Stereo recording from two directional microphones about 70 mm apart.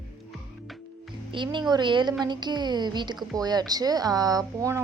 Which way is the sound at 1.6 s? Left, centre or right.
Right.